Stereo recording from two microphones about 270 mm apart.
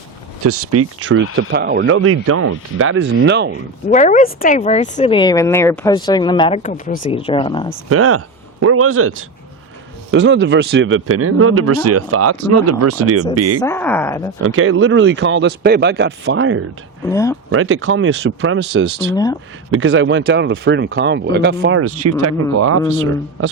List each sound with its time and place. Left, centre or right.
0.4 s speech: right
3.8 s speech: left
7.9 s speech: right
13.6 s speech: centre
14.4 s speech: right
17.1 s speech: centre
17.5 s speech: right
19.1 s speech: centre
19.7 s speech: right
21.8 s speech: right
22.9 s speech: right